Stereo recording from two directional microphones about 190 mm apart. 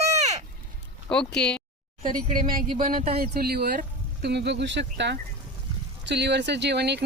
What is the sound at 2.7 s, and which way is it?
Speech, 30° right (ahead or behind).